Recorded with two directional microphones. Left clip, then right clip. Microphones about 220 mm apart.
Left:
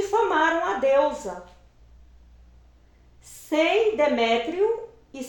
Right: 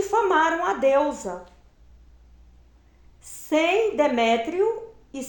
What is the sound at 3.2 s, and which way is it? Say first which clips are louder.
A woman's voice: right 1 dB; 45° right (ahead or behind).